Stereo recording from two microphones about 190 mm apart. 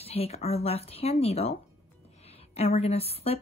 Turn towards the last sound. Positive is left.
turn(degrees=30)  # may be behind; listen again after turning